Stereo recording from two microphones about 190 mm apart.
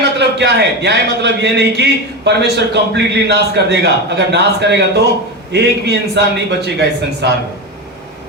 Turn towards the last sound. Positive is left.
turn(degrees=-60)  # may be behind; listen again after turning